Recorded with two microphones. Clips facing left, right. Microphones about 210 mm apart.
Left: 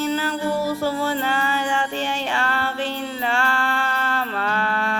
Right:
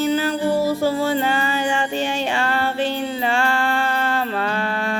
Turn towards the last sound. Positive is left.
turn(degrees=-20)  # may be behind; listen again after turning